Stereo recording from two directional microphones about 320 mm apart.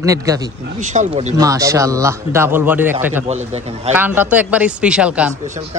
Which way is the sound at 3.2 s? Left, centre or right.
Centre.